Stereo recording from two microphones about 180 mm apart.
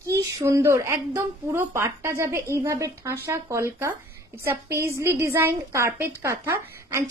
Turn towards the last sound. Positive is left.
turn(degrees=-15)  # may be behind; listen again after turning